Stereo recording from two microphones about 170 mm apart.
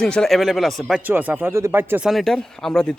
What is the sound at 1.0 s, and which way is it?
Speech, 10° right (ahead or behind).